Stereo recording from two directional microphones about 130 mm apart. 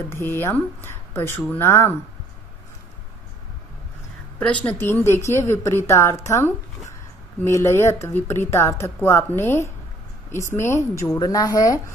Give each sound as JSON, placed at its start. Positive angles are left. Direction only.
{"t": 0.1, "sound": "speech", "side_deg": 20}
{"t": 4.6, "sound": "speech", "side_deg": 15}